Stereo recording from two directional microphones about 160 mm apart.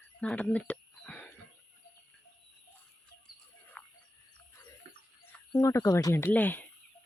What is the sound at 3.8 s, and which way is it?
Cricket, 10° left (ahead or behind).